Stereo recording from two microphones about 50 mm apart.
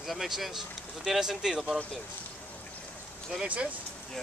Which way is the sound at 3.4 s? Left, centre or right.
Right.